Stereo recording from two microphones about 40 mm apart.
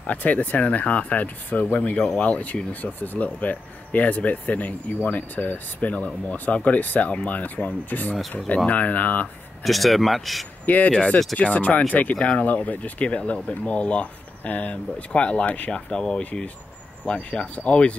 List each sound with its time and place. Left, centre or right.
0.0 s speech: left
9.6 s speech: centre
10.6 s speech: left
12.2 s speech: left
12.4 s speech: left
15.4 s speech: left
15.7 s speech: left
17.0 s speech: left